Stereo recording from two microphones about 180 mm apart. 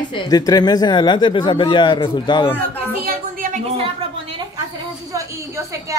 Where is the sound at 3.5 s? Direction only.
35° right (ahead or behind).